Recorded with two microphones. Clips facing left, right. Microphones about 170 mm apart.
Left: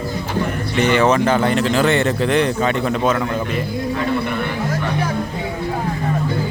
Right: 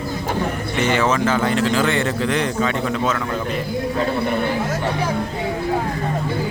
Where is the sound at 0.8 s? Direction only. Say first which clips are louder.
Left 4 dB; 60° left (ahead or behind).